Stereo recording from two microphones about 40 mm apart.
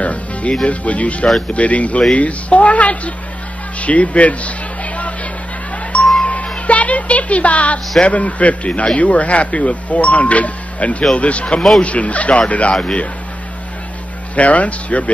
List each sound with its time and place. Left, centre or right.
0.0 s music: left
0.7 s a man's voice: left
6.2 s music: left
6.7 s a woman's voice: left
14.3 s speech: left